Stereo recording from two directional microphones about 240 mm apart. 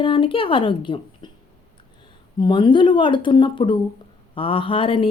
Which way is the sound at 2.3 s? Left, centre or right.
Centre.